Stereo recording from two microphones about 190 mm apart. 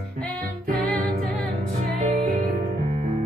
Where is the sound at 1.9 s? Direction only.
35° right (ahead or behind).